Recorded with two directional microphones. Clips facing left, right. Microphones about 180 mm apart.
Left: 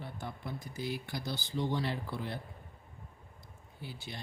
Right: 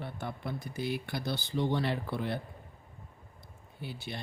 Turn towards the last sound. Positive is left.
turn(degrees=-65)  # may be behind; listen again after turning